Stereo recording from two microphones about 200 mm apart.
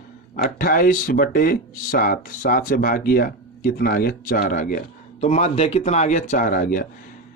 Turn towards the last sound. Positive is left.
turn(degrees=45)  # may be behind; listen again after turning